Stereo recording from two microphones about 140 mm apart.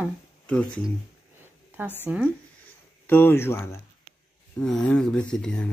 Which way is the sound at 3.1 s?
15° left (ahead or behind).